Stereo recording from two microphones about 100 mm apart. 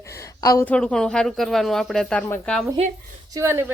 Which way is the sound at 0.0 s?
30° left (ahead or behind).